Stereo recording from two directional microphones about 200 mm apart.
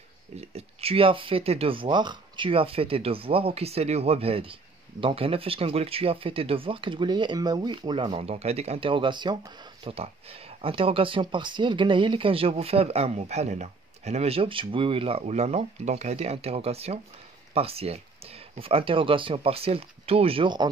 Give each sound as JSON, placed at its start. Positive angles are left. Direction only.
{"t": 0.4, "sound": "speech", "side_deg": -30}